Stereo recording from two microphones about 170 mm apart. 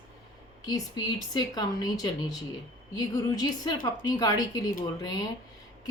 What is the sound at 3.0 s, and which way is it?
A woman's voice, 20° left (ahead or behind).